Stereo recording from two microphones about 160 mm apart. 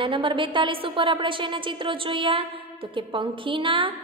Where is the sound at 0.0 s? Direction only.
35° right (ahead or behind).